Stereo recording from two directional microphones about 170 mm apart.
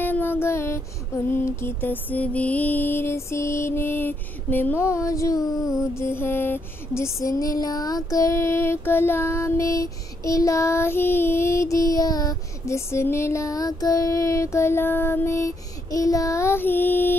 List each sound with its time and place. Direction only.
0.0 s music: 10° left (ahead or behind)